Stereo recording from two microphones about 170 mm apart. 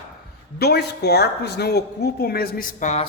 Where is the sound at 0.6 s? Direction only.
75° left (ahead or behind).